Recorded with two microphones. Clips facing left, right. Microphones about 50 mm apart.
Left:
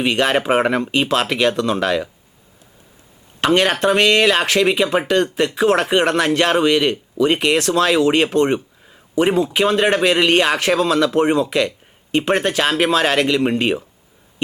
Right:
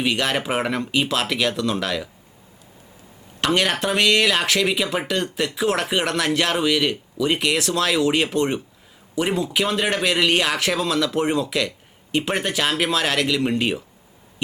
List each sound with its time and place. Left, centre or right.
0.1 s speech: centre
3.4 s speech: centre